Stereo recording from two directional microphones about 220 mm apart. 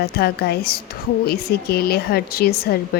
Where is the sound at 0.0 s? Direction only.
45° left (ahead or behind).